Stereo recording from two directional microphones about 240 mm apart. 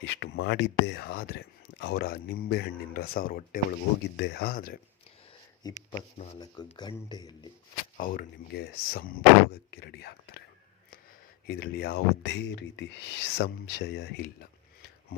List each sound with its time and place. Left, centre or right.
0.0 s speech: left
5.6 s speech: centre
7.9 s speech: left
11.4 s speech: left